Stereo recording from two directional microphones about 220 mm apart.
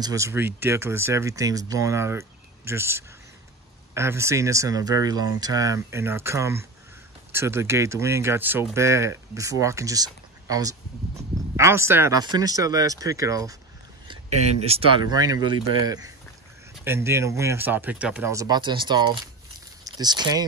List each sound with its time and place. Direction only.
0.0 s speech: 15° right (ahead or behind)
14.0 s speech: 30° right (ahead or behind)